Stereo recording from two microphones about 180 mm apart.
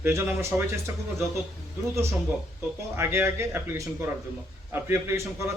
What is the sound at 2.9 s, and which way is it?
Speech, 10° right (ahead or behind).